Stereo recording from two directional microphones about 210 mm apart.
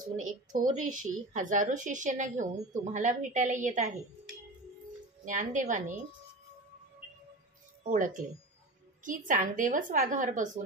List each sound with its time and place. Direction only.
0.0 s a woman's voice: 40° right (ahead or behind)
5.2 s a woman's voice: 40° right (ahead or behind)
7.8 s a woman's voice: 40° right (ahead or behind)